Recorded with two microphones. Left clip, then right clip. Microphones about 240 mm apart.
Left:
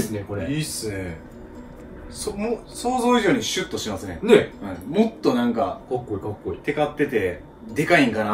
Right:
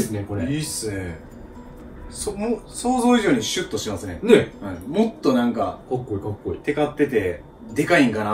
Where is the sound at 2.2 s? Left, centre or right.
Centre.